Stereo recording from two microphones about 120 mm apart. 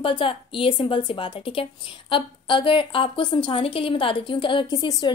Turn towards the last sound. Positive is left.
turn(degrees=40)  # may be behind; listen again after turning